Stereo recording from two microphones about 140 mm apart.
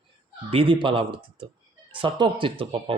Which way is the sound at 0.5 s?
40° right (ahead or behind).